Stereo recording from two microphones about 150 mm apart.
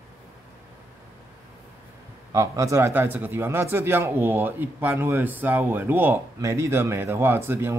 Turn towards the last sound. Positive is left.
turn(degrees=-15)  # may be behind; listen again after turning